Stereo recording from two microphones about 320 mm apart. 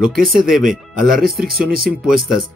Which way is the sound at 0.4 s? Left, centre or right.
Centre.